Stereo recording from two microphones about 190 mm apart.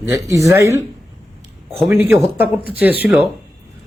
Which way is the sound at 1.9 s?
10° right (ahead or behind).